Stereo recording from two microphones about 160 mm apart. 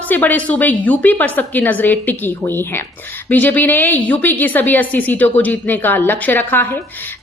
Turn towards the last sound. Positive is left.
turn(degrees=10)  # may be behind; listen again after turning